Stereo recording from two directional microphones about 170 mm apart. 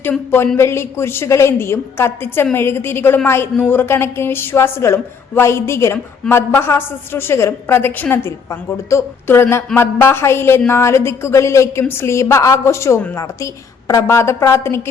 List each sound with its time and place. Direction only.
0.0 s speech: 10° left (ahead or behind)